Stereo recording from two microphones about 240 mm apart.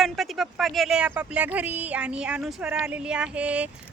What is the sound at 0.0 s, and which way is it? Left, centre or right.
Speech, centre.